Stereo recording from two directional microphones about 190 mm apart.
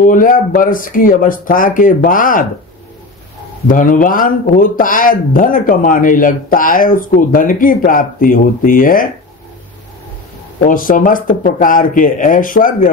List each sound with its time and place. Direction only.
0.0 s speech: 45° left (ahead or behind)
3.6 s speech: 45° left (ahead or behind)
10.6 s speech: 45° left (ahead or behind)